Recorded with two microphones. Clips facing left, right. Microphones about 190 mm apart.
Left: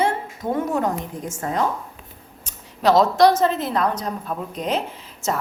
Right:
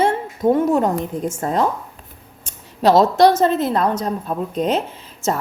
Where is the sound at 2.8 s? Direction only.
25° right (ahead or behind).